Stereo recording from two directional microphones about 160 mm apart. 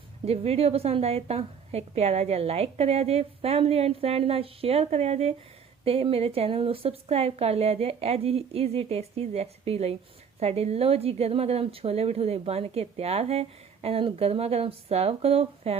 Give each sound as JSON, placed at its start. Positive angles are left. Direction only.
{"t": 0.3, "sound": "a woman's voice", "side_deg": -40}